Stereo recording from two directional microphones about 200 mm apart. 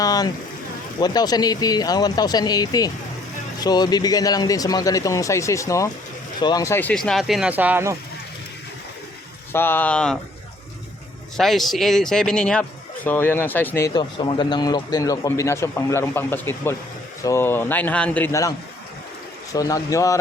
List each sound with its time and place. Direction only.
0.0 s speech: 20° left (ahead or behind); by 7.9 s 10° right (ahead or behind)
9.5 s speech: 10° left (ahead or behind)
11.3 s speech: centre (ahead or behind)
19.5 s speech: 15° left (ahead or behind)